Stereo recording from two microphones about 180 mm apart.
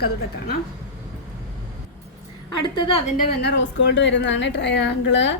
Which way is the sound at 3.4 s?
80° left.